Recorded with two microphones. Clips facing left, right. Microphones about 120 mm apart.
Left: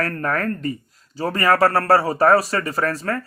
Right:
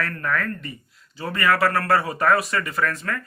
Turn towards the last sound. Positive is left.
turn(degrees=35)  # may be behind; listen again after turning